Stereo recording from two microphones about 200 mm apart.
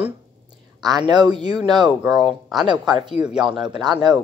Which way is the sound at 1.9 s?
Centre (ahead or behind).